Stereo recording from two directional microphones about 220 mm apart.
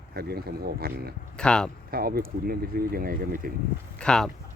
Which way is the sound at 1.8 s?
45° right (ahead or behind).